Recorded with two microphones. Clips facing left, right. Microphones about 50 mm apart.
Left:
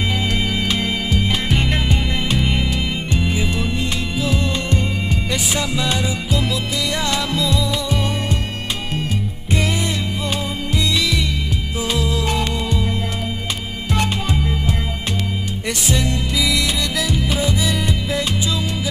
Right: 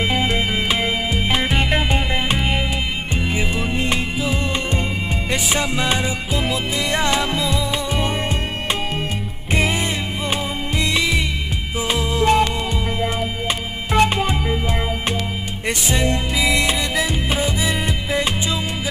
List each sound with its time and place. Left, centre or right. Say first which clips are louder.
0.1 s music: right 2 dB; right
5.3 s music: right 3 dB; right
10.8 s music: right 1 dB; right
13.9 s music: right 5 dB; right
15.9 s music: even; right